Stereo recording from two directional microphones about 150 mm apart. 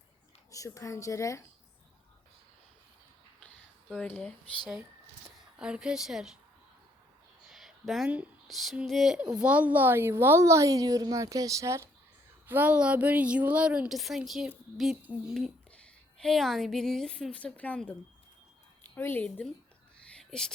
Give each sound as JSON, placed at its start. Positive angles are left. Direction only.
{"t": 0.5, "sound": "speech", "side_deg": 20}
{"t": 3.9, "sound": "speech", "side_deg": 5}
{"t": 7.5, "sound": "a woman's voice", "side_deg": 0}
{"t": 20.1, "sound": "whispering", "side_deg": 5}